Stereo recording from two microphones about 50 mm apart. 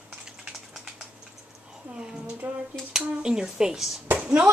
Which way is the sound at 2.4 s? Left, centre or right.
Right.